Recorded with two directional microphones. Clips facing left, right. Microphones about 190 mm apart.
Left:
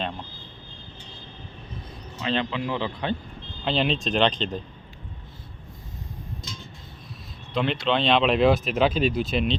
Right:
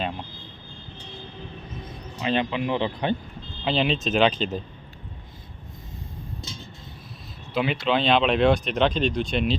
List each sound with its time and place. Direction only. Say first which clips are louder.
2.2 s speech: right 2 dB; 15° right (ahead or behind)
3.6 s speech: right 1 dB; centre (ahead or behind)
7.5 s speech: right 1 dB; 5° right (ahead or behind)